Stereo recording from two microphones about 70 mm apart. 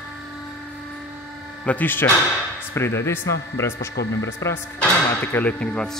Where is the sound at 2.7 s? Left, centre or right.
Left.